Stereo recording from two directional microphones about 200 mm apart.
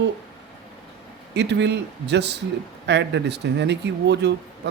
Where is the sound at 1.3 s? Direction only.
60° right (ahead or behind).